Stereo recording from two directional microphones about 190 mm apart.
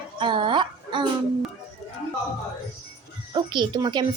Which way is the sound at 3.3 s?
25° right (ahead or behind).